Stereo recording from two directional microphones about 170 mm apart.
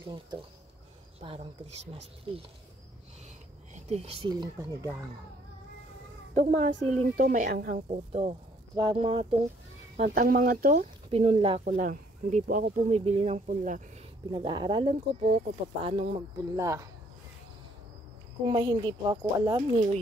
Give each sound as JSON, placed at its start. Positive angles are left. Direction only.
{"t": 1.2, "sound": "speech", "side_deg": -30}
{"t": 3.7, "sound": "speech", "side_deg": -40}
{"t": 6.3, "sound": "speech", "side_deg": -50}
{"t": 7.7, "sound": "speech", "side_deg": -35}
{"t": 9.9, "sound": "speech", "side_deg": -50}
{"t": 11.1, "sound": "speech", "side_deg": -35}
{"t": 11.6, "sound": "speech", "side_deg": -55}
{"t": 14.3, "sound": "speech", "side_deg": -25}
{"t": 16.3, "sound": "speech", "side_deg": -20}
{"t": 18.5, "sound": "speech", "side_deg": -25}